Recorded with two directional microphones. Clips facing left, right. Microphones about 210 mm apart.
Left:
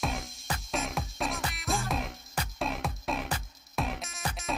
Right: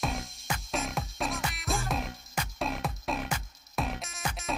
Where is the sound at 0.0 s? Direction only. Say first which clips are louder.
Even; centre (ahead or behind).